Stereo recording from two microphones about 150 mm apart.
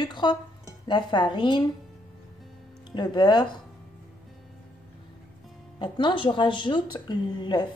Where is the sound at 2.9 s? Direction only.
30° left (ahead or behind).